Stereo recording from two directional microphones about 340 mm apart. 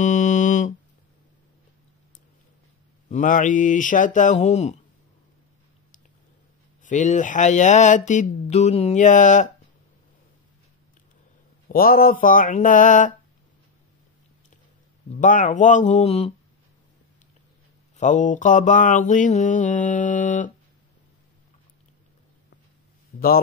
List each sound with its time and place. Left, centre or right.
0.0 s a sound: left
3.1 s speech: left
6.8 s speech: left
11.7 s speech: left
15.1 s speech: left
17.9 s speech: left
23.1 s a sound: left